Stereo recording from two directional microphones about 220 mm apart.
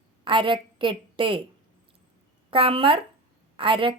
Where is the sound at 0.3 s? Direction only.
20° right (ahead or behind).